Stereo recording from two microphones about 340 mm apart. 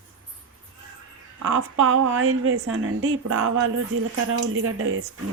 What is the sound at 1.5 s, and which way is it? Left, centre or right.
A woman's voice, right.